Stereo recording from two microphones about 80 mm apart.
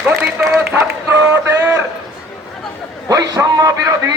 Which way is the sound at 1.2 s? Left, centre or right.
Right.